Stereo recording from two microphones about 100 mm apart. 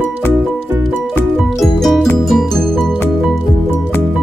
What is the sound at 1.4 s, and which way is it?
Music, centre (ahead or behind).